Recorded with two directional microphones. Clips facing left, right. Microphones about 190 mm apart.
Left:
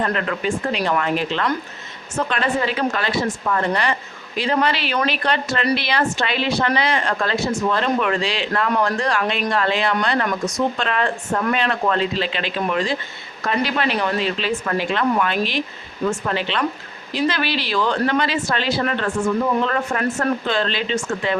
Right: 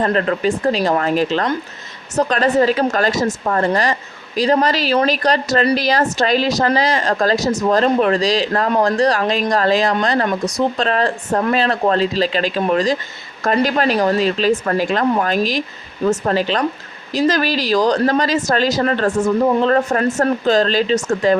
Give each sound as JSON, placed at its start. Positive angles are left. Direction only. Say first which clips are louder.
{"t": 0.0, "sound": "a woman's voice", "louder": "right 5 dB", "side_deg": -35}